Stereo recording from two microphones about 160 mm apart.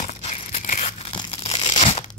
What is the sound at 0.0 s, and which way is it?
Tearing, 45° left (ahead or behind).